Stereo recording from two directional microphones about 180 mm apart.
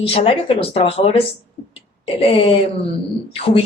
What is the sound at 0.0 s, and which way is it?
Speech, 30° left (ahead or behind).